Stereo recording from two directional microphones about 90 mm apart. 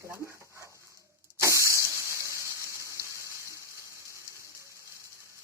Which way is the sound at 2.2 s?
35° right (ahead or behind).